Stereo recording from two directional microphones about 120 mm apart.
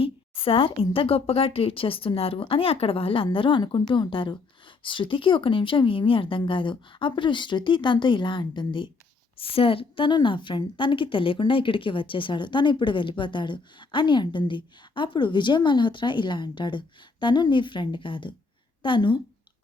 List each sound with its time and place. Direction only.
0.0 s a woman's voice: 50° left (ahead or behind)